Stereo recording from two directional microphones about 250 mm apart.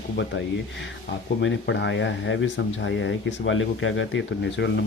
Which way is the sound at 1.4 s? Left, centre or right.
Left.